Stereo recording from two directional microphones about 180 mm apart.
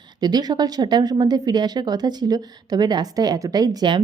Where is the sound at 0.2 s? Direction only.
20° right (ahead or behind).